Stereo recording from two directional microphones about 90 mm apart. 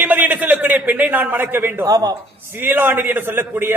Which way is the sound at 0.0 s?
20° right (ahead or behind).